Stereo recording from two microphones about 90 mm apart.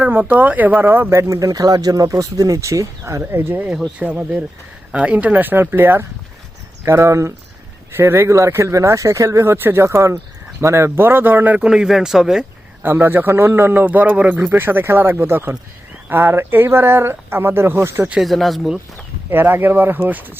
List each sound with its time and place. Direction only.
0.0 s speech: 20° right (ahead or behind)
3.7 s a man's voice: 10° right (ahead or behind)
12.8 s a man's voice: 25° right (ahead or behind)
18.2 s speech: centre (ahead or behind)
19.3 s a man's voice: 25° right (ahead or behind)